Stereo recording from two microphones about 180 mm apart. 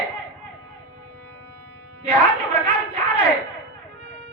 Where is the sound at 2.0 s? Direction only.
30° right (ahead or behind).